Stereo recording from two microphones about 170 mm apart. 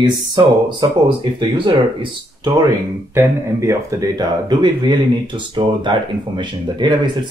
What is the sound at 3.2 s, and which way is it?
Speech, 15° right (ahead or behind).